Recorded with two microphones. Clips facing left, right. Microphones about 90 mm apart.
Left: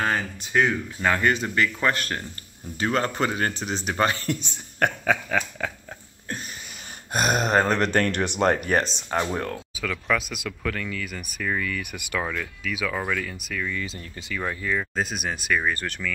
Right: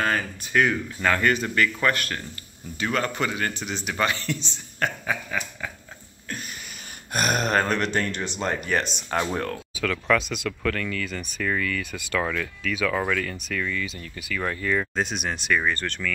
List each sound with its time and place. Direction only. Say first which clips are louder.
0.0 s speech: even; 20° left (ahead or behind); by 5.7 s 70° left (ahead or behind)
7.1 s speech: left 1 dB; 20° left (ahead or behind)
7.6 s speech: left 2 dB; 30° left (ahead or behind)
7.9 s speech: left 4 dB; 55° left (ahead or behind); by 8.9 s 40° left (ahead or behind)
9.1 s speech: even; 10° left (ahead or behind)
13.7 s speech: right 1 dB; 30° left (ahead or behind)
14.3 s speech: right 2 dB; 10° left (ahead or behind)